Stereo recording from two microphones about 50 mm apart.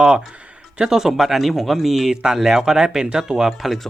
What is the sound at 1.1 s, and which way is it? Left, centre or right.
Speech, centre.